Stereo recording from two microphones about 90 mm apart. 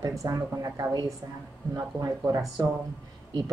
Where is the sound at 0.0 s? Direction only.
40° right (ahead or behind).